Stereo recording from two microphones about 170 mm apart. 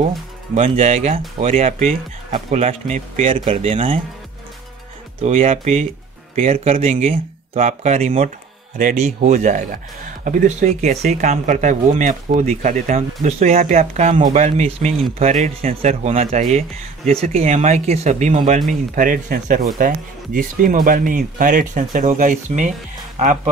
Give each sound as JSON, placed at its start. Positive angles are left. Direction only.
{"t": 0.6, "sound": "speech", "side_deg": -40}
{"t": 5.2, "sound": "speech", "side_deg": -35}
{"t": 18.7, "sound": "speech", "side_deg": -55}